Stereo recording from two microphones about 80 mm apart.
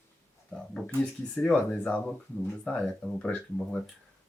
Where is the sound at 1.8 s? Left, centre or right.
Centre.